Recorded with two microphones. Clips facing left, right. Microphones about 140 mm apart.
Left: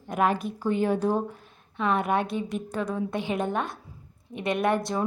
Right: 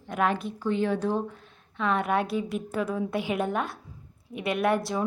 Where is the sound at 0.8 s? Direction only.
10° left (ahead or behind).